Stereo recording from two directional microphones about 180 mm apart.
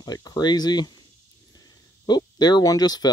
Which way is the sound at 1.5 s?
20° left (ahead or behind).